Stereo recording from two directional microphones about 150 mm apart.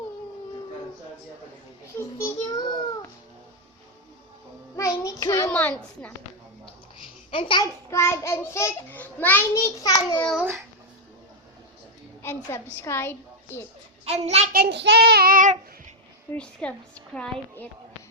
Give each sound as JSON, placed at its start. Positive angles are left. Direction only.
{"t": 2.0, "sound": "child singing", "side_deg": 20}
{"t": 5.0, "sound": "a sound", "side_deg": 20}
{"t": 5.5, "sound": "a child's voice", "side_deg": 10}
{"t": 7.3, "sound": "speech", "side_deg": 35}
{"t": 7.9, "sound": "a child's voice", "side_deg": 20}
{"t": 10.2, "sound": "a child's voice", "side_deg": 5}
{"t": 12.2, "sound": "a child's voice", "side_deg": 15}
{"t": 14.0, "sound": "a child's voice", "side_deg": -45}
{"t": 14.5, "sound": "child singing", "side_deg": -90}
{"t": 16.3, "sound": "a child's voice", "side_deg": 10}